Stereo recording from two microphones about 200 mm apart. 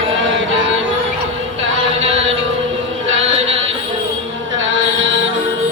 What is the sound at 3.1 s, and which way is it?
Chant, 70° right (ahead or behind).